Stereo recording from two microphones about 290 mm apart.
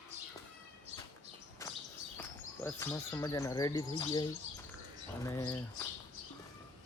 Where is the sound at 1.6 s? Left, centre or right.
Centre.